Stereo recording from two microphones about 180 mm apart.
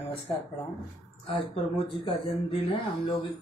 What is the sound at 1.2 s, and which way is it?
Speech, 30° left (ahead or behind).